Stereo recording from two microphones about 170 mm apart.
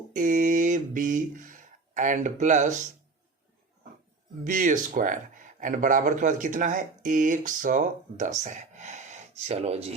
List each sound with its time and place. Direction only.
0.1 s speech: 50° right (ahead or behind)
4.4 s speech: 50° right (ahead or behind)